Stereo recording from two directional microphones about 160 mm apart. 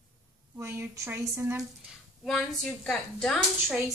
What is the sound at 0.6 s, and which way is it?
Speech, 15° right (ahead or behind).